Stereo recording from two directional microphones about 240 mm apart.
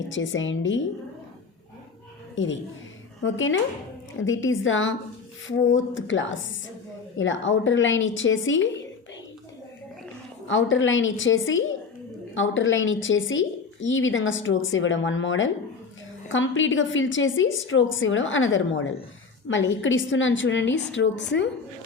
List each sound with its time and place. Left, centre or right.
0.1 s a woman's voice: left
2.3 s a woman's voice: left
10.4 s a woman's voice: left